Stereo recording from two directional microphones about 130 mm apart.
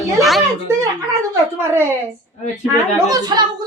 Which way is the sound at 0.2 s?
Centre (ahead or behind).